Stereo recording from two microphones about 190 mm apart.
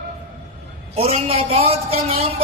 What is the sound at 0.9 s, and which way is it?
A man's voice, 30° right (ahead or behind).